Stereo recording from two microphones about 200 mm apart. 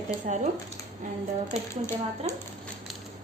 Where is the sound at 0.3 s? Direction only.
40° right (ahead or behind).